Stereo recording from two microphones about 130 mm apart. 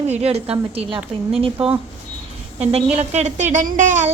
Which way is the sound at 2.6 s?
55° right (ahead or behind).